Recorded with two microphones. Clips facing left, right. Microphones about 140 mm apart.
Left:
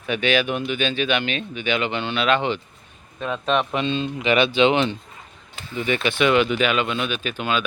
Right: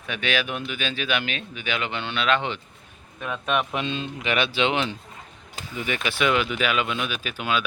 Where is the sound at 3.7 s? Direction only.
5° right (ahead or behind).